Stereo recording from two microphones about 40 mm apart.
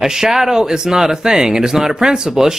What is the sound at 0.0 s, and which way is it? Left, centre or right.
Speech, centre.